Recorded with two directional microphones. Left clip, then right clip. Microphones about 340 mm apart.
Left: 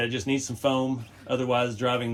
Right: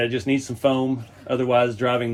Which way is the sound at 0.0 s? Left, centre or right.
Centre.